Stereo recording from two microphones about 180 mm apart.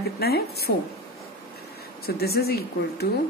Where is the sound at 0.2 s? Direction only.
60° left (ahead or behind).